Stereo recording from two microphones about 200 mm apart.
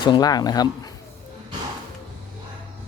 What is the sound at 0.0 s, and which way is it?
Speech, 20° left (ahead or behind).